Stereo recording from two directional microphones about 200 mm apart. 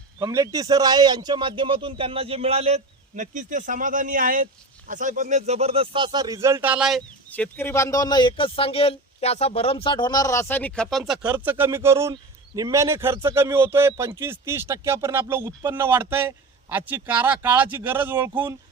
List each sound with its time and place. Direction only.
0.2 s a man's voice: 20° right (ahead or behind)
7.3 s speech: 10° left (ahead or behind); by 18.5 s 10° right (ahead or behind)